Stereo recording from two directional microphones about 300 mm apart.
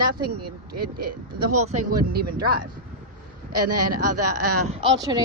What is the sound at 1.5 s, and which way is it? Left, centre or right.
Speech, right.